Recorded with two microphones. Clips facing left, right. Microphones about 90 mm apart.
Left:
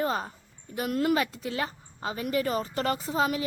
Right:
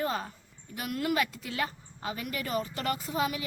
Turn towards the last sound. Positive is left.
turn(degrees=30)  # may be behind; listen again after turning